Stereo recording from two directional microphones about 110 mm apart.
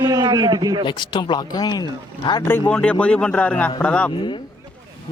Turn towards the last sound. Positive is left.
turn(degrees=50)  # may be behind; listen again after turning